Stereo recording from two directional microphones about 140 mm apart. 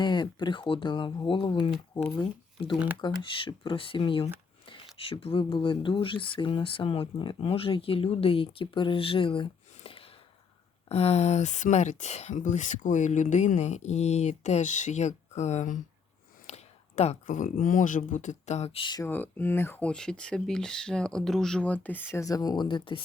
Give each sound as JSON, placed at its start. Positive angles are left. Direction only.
{"t": 0.0, "sound": "speech", "side_deg": 35}
{"t": 2.7, "sound": "speech", "side_deg": -10}
{"t": 3.0, "sound": "speech", "side_deg": 35}
{"t": 16.5, "sound": "a sound", "side_deg": 50}
{"t": 17.2, "sound": "speech", "side_deg": 75}
{"t": 19.0, "sound": "speech", "side_deg": 15}